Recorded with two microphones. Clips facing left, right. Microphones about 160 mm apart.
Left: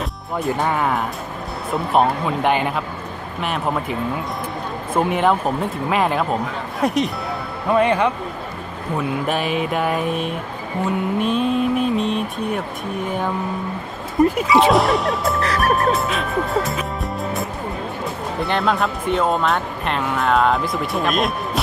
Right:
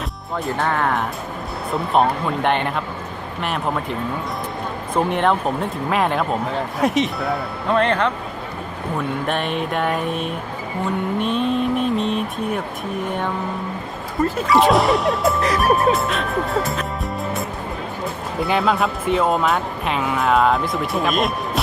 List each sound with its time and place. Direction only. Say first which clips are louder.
0.6 s speech: right 2 dB; 10° left (ahead or behind)
4.9 s speech: left 1 dB; 5° left (ahead or behind)
14.2 s speech: left 5 dB; 15° left (ahead or behind)
14.4 s speech: even; centre (ahead or behind)
15.4 s music: right 1 dB; 15° right (ahead or behind)
15.7 s speech: right 1 dB; centre (ahead or behind)